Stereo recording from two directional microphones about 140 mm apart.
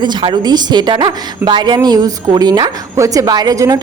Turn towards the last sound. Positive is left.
turn(degrees=-25)  # may be behind; listen again after turning